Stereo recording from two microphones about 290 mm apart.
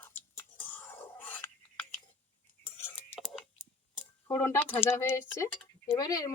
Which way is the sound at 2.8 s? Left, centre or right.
Centre.